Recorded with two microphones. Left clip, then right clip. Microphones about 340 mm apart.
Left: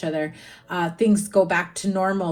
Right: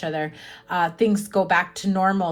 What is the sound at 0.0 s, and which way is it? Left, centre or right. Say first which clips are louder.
Speech: left 1 dB; right.